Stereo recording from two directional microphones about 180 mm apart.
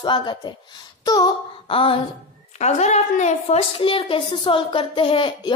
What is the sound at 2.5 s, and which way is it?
A woman's voice, 40° left (ahead or behind).